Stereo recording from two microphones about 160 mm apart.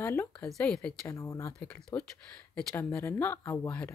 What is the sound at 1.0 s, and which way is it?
Speech, 20° left (ahead or behind).